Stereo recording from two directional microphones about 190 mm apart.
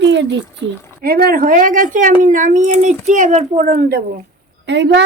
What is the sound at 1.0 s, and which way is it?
A woman's voice, 50° right (ahead or behind).